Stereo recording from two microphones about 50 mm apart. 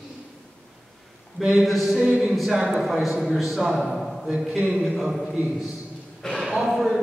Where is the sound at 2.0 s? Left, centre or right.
Centre.